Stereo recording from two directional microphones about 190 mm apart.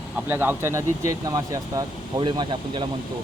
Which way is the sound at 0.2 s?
10° right (ahead or behind).